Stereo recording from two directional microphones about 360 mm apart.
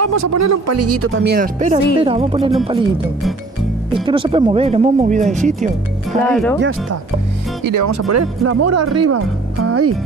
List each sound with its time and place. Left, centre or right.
0.0 s speech: right; by 2.9 s centre
3.9 s speech: centre
6.2 s speech: centre
7.6 s speech: right